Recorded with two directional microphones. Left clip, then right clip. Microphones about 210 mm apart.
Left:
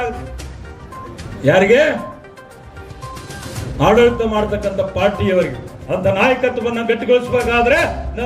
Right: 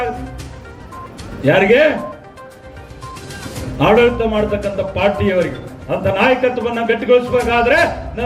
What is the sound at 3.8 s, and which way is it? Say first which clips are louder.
A man's voice: even; 15° left (ahead or behind).